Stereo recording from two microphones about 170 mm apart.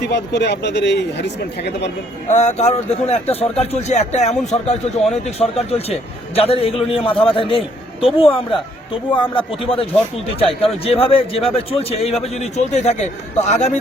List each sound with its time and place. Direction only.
0.0 s speech: 85° left
2.2 s a man's voice: 45° left (ahead or behind)